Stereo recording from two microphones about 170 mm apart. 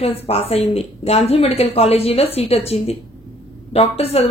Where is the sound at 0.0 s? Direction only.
35° left (ahead or behind).